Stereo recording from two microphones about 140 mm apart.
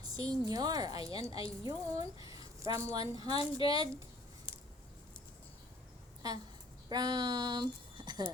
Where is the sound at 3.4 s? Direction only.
40° left (ahead or behind).